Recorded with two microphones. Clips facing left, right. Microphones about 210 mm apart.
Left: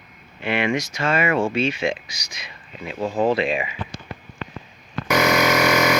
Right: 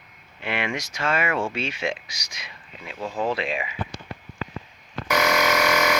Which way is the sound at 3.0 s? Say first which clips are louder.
Left 6 dB; 25° left (ahead or behind).